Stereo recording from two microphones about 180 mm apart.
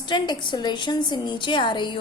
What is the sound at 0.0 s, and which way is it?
A child's voice, 25° left (ahead or behind).